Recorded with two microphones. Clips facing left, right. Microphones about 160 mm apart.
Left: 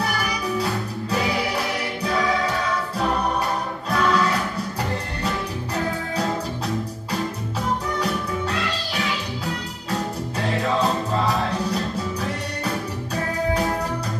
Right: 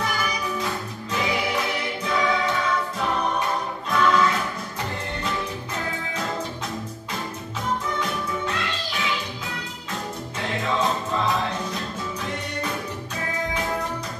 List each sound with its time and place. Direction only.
0.6 s music: 35° left (ahead or behind)
3.9 s music: 35° left (ahead or behind)
10.8 s music: 35° left (ahead or behind)